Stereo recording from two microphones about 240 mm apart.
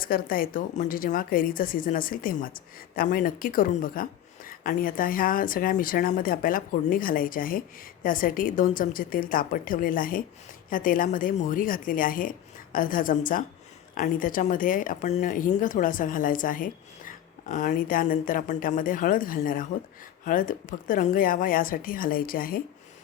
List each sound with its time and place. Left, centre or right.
0.0 s a woman's voice: left